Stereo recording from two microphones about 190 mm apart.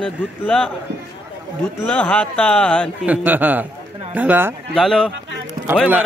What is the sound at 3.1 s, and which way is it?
A man's voice, 10° right (ahead or behind).